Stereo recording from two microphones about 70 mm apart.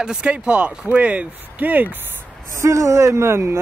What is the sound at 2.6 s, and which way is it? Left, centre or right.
Speech, right.